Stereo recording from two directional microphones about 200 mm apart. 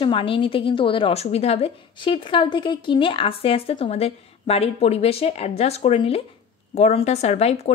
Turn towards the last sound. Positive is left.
turn(degrees=30)  # may be behind; listen again after turning